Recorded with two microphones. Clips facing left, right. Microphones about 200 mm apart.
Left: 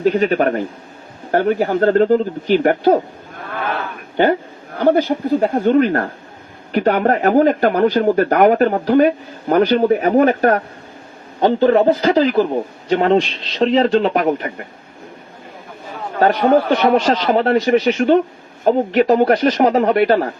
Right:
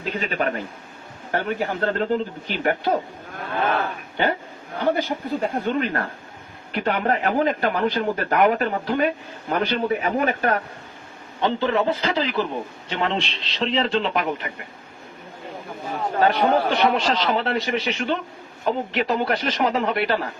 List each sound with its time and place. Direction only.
0.0 s speech: 40° left (ahead or behind)
5.4 s speech: 45° left (ahead or behind)
16.2 s speech: 40° left (ahead or behind)